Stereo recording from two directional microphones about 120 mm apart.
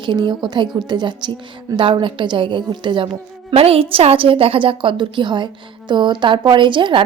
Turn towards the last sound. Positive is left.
turn(degrees=-45)  # may be behind; listen again after turning